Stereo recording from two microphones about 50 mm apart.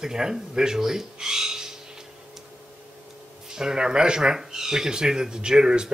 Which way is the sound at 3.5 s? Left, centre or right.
Centre.